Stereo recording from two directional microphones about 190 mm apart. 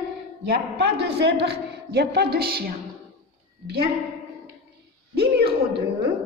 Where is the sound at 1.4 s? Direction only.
55° right (ahead or behind).